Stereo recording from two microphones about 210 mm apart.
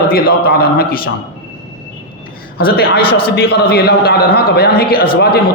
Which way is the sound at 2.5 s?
45° left (ahead or behind).